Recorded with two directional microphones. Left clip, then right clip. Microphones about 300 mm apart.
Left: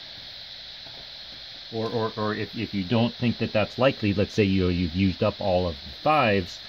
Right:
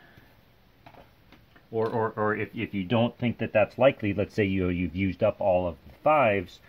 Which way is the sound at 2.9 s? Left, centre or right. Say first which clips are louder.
Even; centre.